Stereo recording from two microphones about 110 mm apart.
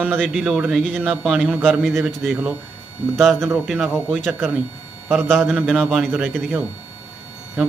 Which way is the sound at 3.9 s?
5° left (ahead or behind).